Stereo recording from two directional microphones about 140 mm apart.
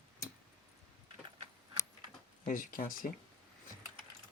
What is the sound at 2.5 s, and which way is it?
Speech, 80° left.